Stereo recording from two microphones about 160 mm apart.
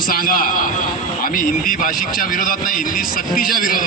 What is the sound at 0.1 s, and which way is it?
A man's voice, 60° left (ahead or behind).